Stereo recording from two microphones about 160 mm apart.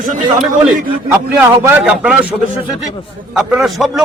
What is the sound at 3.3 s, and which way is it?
Speech, 5° right (ahead or behind).